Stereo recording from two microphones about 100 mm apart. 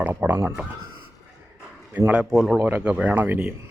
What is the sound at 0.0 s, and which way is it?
Speech, 15° right (ahead or behind).